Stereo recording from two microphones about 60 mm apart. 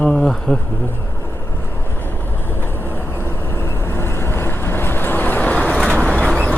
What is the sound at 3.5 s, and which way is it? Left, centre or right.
Vehicle, left.